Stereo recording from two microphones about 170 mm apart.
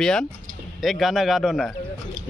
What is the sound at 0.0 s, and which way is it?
A man's voice, 5° left (ahead or behind).